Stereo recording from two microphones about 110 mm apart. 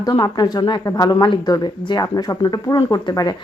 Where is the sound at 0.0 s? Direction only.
35° left (ahead or behind).